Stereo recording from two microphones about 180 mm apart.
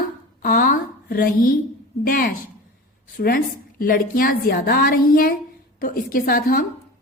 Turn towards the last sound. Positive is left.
turn(degrees=55)  # may be behind; listen again after turning